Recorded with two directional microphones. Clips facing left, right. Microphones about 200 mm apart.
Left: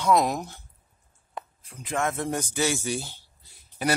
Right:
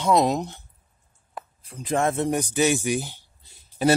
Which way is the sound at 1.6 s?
35° right (ahead or behind).